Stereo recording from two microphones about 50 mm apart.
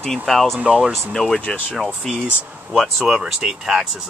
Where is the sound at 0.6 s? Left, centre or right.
Centre.